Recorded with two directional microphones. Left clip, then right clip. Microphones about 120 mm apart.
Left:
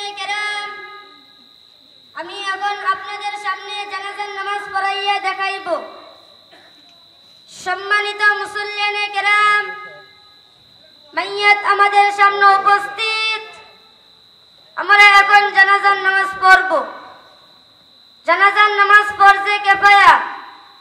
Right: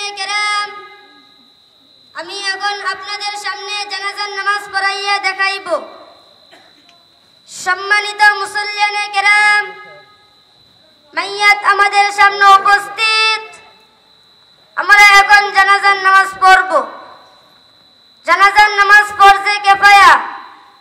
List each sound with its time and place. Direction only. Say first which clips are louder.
0.0 s child singing: right 5 dB; 20° right (ahead or behind)
2.1 s child singing: right 3 dB; 25° right (ahead or behind)
7.5 s child singing: right 4 dB; 20° right (ahead or behind)
11.1 s speech: right 2 dB; 20° right (ahead or behind)
14.8 s child singing: right 3 dB; 20° right (ahead or behind)
16.2 s a man's voice: right 1 dB; 20° right (ahead or behind)
18.2 s child singing: right 4 dB; 20° right (ahead or behind)